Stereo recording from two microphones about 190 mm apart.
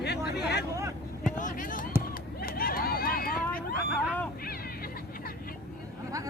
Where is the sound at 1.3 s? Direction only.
45° left (ahead or behind).